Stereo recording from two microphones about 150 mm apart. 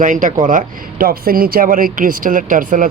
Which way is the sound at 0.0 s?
60° right (ahead or behind).